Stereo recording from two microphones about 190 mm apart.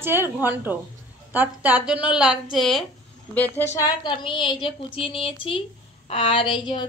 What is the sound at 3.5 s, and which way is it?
A woman's voice, 15° left (ahead or behind).